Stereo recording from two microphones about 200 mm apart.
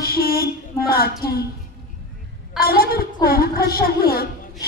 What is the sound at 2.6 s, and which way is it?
Music, 50° left (ahead or behind).